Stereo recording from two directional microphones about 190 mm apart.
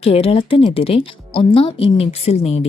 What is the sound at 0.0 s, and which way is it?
Speech, 30° left (ahead or behind).